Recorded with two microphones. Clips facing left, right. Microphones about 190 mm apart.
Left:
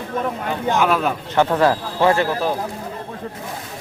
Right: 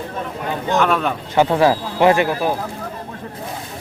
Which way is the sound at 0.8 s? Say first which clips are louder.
Right 1 dB; 5° left (ahead or behind).